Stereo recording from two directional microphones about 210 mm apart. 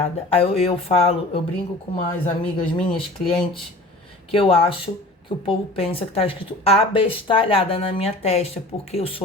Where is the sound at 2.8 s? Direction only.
25° left (ahead or behind).